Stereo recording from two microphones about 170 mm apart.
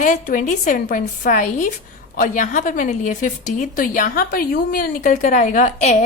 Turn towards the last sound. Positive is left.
turn(degrees=40)  # may be behind; listen again after turning